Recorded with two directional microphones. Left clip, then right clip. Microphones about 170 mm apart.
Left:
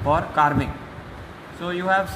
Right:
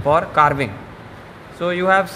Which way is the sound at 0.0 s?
60° right (ahead or behind).